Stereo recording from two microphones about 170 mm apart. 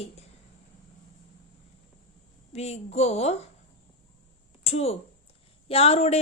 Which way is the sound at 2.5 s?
40° left (ahead or behind).